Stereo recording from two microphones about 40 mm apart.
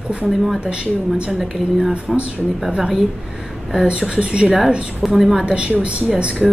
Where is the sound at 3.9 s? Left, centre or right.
Right.